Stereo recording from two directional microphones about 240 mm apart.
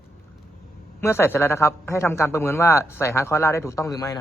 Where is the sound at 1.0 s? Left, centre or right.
Centre.